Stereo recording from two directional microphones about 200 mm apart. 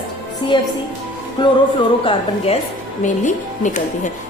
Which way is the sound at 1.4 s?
25° left (ahead or behind).